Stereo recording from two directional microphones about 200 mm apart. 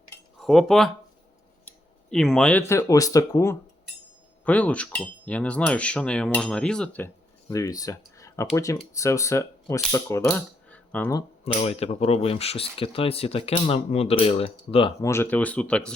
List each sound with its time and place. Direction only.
0.3 s speech: centre (ahead or behind)
4.4 s cutlery: 5° left (ahead or behind)
7.5 s speech: 15° left (ahead or behind)
11.4 s speech: 30° left (ahead or behind)
15.0 s speech: 10° left (ahead or behind)